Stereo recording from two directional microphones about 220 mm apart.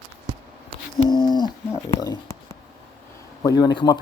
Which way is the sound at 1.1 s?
20° left (ahead or behind).